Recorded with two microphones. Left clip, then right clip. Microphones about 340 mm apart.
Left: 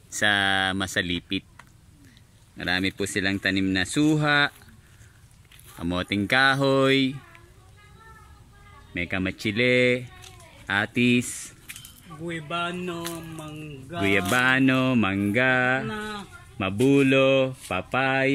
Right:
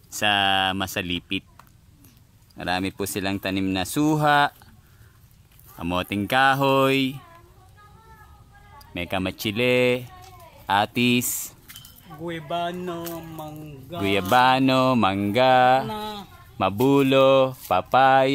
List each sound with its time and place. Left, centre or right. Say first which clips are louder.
0.1 s speech: right 1 dB; centre
5.8 s speech: right 1 dB; centre
8.9 s speech: right 1 dB; centre